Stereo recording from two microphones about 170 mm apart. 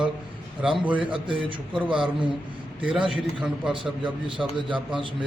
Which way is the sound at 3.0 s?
5° right (ahead or behind).